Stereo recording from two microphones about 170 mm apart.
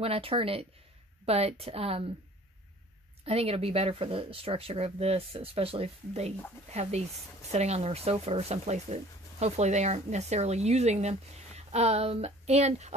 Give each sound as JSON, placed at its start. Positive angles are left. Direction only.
{"t": 0.0, "sound": "speech", "side_deg": -35}
{"t": 3.3, "sound": "speech", "side_deg": -35}